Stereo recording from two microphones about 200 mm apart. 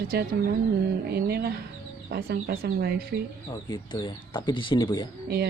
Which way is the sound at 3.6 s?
25° left (ahead or behind).